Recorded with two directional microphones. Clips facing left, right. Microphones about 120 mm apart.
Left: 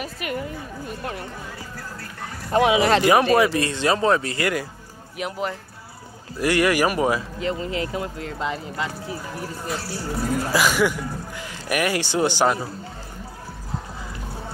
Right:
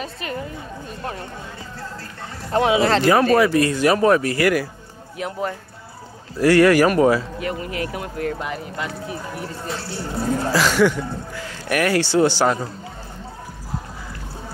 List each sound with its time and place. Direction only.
0.0 s a sound: 30° right (ahead or behind)
2.5 s speech: 15° left (ahead or behind)
6.4 s speech: 15° left (ahead or behind)
9.0 s speech: 25° right (ahead or behind)
10.5 s speech: 10° left (ahead or behind)